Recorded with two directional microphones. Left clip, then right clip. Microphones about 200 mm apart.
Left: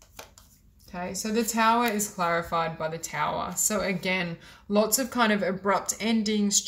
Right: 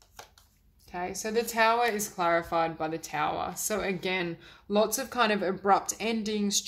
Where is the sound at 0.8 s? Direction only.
40° right (ahead or behind).